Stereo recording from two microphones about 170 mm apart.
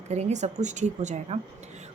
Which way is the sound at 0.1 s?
40° right (ahead or behind).